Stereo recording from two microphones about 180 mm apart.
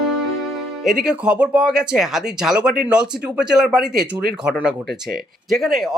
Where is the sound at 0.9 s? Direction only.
5° right (ahead or behind).